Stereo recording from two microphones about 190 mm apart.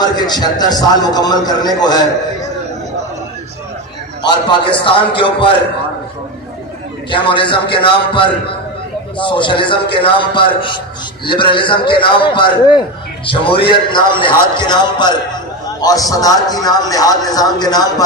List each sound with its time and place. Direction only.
0.0 s a man's voice: 20° left (ahead or behind)
4.2 s a man's voice: 25° left (ahead or behind)
7.2 s a man's voice: 25° left (ahead or behind)